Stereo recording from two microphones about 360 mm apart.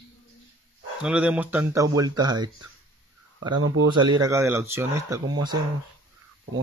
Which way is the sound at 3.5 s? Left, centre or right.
Right.